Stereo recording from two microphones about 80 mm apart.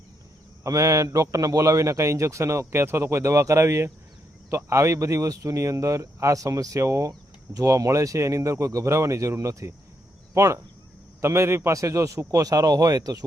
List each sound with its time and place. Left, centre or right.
0.6 s a man's voice: right